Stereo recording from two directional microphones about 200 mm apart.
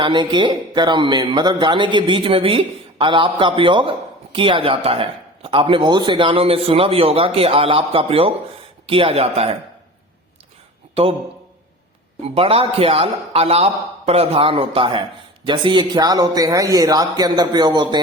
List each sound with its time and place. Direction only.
0.0 s speech: 25° right (ahead or behind)
11.0 s speech: 30° right (ahead or behind)
12.2 s speech: 30° right (ahead or behind)